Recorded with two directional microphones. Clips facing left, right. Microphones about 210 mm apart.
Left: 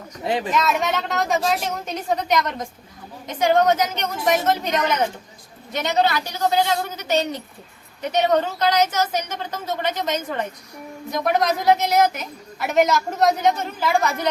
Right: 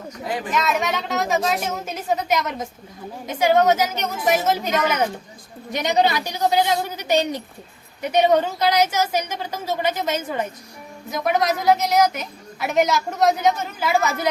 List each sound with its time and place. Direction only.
0.3 s speech: 25° left (ahead or behind)
0.5 s a woman's voice: centre (ahead or behind)